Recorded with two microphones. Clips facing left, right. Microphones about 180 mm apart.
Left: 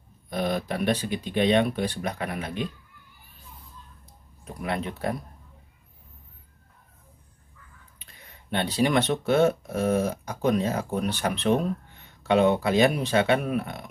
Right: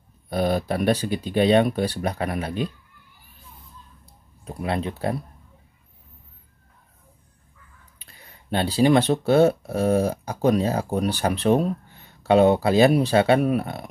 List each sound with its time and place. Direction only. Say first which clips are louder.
0.3 s speech: right 5 dB; 35° right (ahead or behind)
4.5 s speech: right 4 dB; 30° right (ahead or behind)
8.5 s speech: right 5 dB; 30° right (ahead or behind)